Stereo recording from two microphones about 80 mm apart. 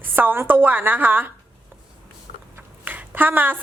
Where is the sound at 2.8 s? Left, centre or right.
Right.